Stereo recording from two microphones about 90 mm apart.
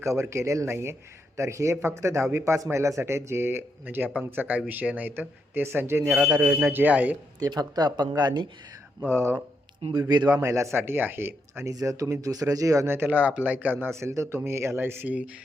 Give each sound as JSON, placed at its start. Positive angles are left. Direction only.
{"t": 0.0, "sound": "speech", "side_deg": -30}
{"t": 6.1, "sound": "speech", "side_deg": -5}
{"t": 6.7, "sound": "speech", "side_deg": -15}
{"t": 7.4, "sound": "speech", "side_deg": -45}
{"t": 9.0, "sound": "speech", "side_deg": -25}
{"t": 10.1, "sound": "a man's voice", "side_deg": -55}
{"t": 10.3, "sound": "speech", "side_deg": -30}
{"t": 11.7, "sound": "speech", "side_deg": -40}
{"t": 12.9, "sound": "speech", "side_deg": -20}